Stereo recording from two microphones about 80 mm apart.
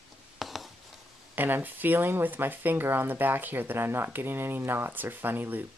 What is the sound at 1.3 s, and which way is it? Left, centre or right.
Speech, right.